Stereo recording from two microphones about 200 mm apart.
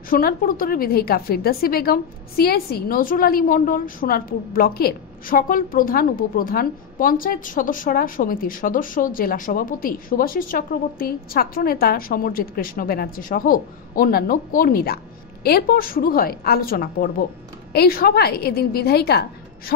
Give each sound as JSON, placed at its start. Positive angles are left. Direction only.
{"t": 0.1, "sound": "a woman's voice", "side_deg": 45}